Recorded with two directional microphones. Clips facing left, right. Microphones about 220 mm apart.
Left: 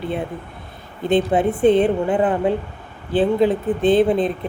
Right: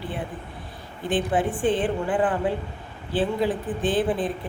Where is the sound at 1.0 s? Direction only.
25° left (ahead or behind).